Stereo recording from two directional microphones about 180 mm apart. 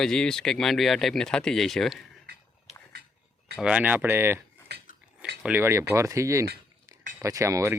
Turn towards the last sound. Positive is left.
turn(degrees=-15)  # may be behind; listen again after turning